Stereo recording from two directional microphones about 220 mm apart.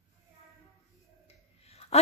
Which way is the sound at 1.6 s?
30° left (ahead or behind).